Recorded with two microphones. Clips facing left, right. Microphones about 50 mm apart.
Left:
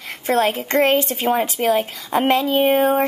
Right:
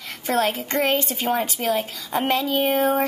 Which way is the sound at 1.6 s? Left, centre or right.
Left.